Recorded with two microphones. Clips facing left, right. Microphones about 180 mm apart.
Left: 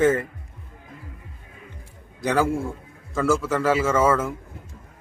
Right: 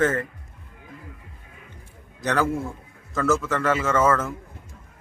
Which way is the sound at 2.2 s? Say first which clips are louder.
Left 2 dB; 10° left (ahead or behind).